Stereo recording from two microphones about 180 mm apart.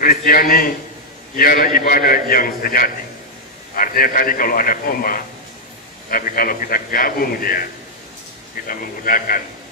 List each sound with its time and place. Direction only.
0.0 s a man's voice: 50° left (ahead or behind)
8.6 s a man's voice: 50° left (ahead or behind)